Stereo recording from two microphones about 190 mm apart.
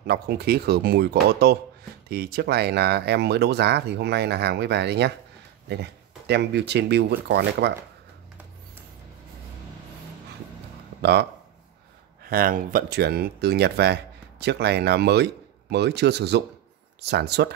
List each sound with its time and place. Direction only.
0.0 s speech: 55° right (ahead or behind)
11.0 s speech: 60° right (ahead or behind)
12.2 s speech: 50° right (ahead or behind)